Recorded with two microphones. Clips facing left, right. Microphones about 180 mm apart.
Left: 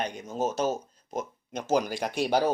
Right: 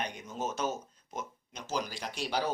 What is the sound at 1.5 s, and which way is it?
Speech, 55° left (ahead or behind).